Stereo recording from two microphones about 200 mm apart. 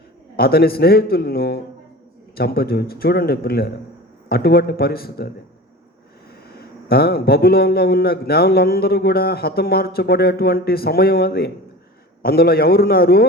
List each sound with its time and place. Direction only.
0.3 s a man's voice: 50° left (ahead or behind)
6.8 s a man's voice: 50° left (ahead or behind)